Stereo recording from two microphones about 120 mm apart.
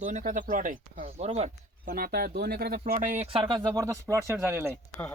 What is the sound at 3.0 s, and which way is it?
Speech, 90° right.